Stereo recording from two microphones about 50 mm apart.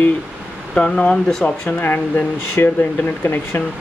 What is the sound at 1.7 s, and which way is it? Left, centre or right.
Speech, left.